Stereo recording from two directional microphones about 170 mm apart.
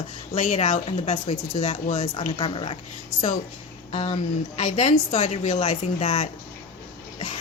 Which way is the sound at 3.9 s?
40° left (ahead or behind).